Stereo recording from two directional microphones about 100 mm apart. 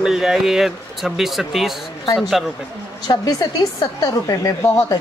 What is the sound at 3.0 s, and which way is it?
A woman's voice, 40° left (ahead or behind).